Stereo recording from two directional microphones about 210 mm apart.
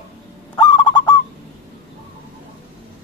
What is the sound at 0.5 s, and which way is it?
Goose, 20° left (ahead or behind).